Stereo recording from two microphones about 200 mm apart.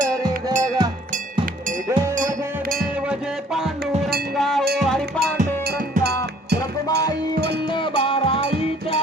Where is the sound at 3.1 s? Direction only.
Centre (ahead or behind).